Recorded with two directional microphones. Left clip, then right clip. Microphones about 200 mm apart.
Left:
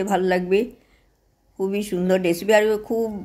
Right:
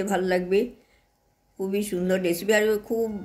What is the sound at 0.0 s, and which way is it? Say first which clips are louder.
Speech: left 4 dB; 45° left (ahead or behind).